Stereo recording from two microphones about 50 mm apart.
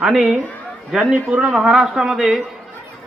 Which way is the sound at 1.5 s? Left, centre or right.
Centre.